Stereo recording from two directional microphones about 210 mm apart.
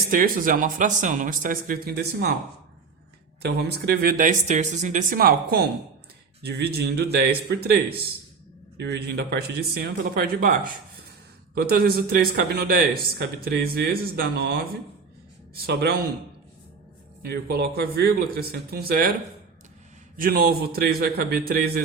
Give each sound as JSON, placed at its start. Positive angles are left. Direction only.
{"t": 0.1, "sound": "speech", "side_deg": -40}
{"t": 3.4, "sound": "speech", "side_deg": -50}
{"t": 11.5, "sound": "speech", "side_deg": -45}
{"t": 17.2, "sound": "speech", "side_deg": -50}
{"t": 20.1, "sound": "speech", "side_deg": -45}